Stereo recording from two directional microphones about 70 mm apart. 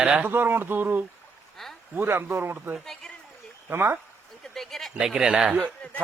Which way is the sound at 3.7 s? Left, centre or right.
Right.